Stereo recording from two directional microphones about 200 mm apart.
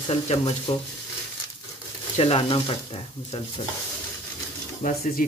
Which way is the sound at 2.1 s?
30° left (ahead or behind).